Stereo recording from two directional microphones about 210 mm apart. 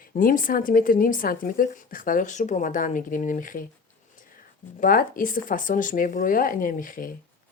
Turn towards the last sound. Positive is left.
turn(degrees=40)  # may be behind; listen again after turning